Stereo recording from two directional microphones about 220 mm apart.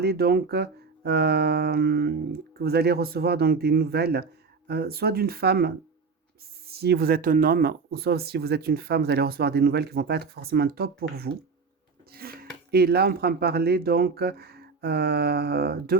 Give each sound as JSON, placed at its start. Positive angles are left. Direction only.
{"t": 0.0, "sound": "speech", "side_deg": -45}
{"t": 6.7, "sound": "speech", "side_deg": -45}
{"t": 12.1, "sound": "a sound", "side_deg": -45}
{"t": 12.7, "sound": "speech", "side_deg": -45}